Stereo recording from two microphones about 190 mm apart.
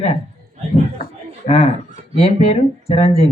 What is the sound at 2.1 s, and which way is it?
Speech, 35° left (ahead or behind).